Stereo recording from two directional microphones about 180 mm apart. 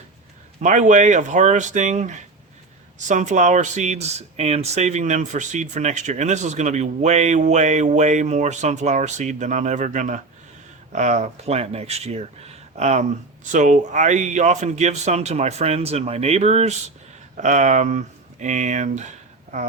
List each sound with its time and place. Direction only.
0.6 s speech: 45° right (ahead or behind)